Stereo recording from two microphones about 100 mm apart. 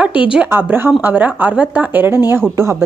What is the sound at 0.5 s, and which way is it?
A woman's voice, 20° right (ahead or behind).